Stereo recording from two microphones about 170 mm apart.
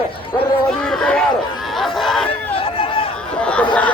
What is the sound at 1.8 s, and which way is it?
Chatter, centre (ahead or behind).